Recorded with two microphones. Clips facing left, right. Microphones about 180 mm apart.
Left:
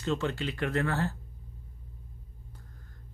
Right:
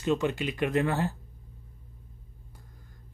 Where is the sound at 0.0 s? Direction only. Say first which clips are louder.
Right 3 dB; 15° right (ahead or behind).